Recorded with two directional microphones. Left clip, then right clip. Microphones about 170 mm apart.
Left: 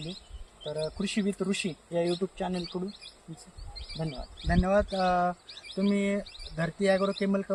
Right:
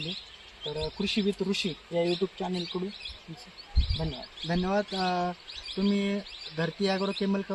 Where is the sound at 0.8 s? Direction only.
Centre (ahead or behind).